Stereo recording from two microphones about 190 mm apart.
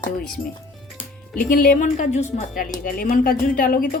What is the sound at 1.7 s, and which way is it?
A woman's voice, 40° left (ahead or behind).